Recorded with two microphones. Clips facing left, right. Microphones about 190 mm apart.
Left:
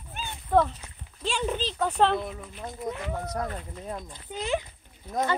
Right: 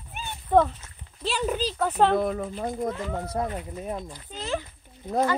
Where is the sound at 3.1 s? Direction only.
30° right (ahead or behind).